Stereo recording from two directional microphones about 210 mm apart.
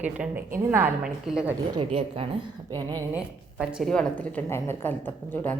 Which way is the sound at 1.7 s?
25° right (ahead or behind).